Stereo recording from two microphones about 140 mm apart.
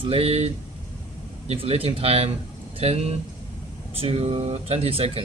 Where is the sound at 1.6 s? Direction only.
40° right (ahead or behind).